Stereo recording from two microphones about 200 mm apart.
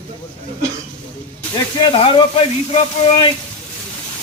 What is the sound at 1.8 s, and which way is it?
Speech, 25° left (ahead or behind).